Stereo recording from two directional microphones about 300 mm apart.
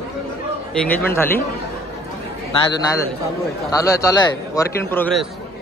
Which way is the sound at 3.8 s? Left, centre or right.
Centre.